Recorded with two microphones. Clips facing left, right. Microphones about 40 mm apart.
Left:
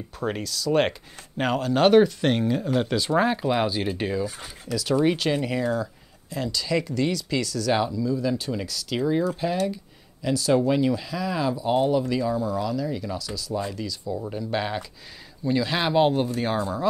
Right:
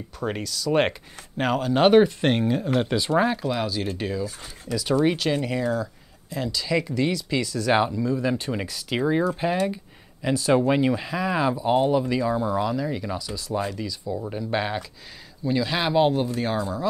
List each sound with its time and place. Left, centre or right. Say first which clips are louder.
0.2 s speech: even; centre
3.4 s speech: left 2 dB; centre
4.6 s speech: even; centre; by 7.9 s right
7.9 s speech: right 1 dB; right
11.6 s speech: even; centre
12.4 s speech: right 2 dB; right
15.4 s speech: even; centre